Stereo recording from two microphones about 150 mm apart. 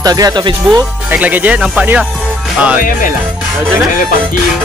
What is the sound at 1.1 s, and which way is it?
Speech, 10° right (ahead or behind).